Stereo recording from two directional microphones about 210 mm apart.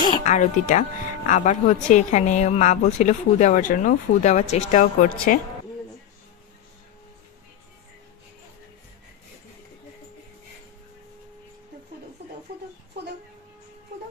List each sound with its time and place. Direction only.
0.2 s speech: 35° left (ahead or behind)